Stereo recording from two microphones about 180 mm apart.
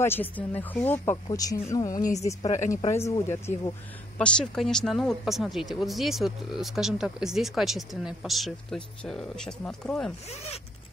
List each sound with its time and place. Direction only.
0.0 s speech: 10° left (ahead or behind)
1.1 s speech: 20° left (ahead or behind)
4.2 s speech: 5° left (ahead or behind)
10.3 s speech: 35° left (ahead or behind)